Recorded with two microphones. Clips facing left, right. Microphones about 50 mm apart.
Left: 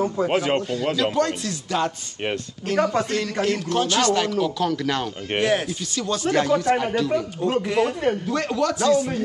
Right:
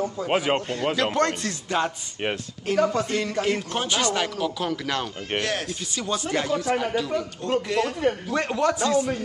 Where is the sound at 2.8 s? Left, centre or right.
Left.